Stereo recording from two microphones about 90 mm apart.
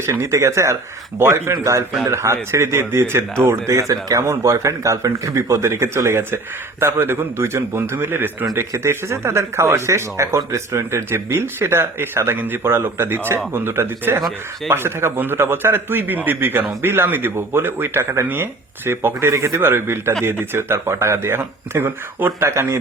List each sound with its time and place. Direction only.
0.0 s speech: 30° right (ahead or behind)
14.2 s speech: centre (ahead or behind)
14.7 s speech: 25° right (ahead or behind)